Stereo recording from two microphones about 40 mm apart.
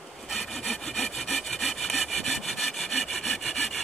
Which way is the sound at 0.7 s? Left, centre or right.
Centre.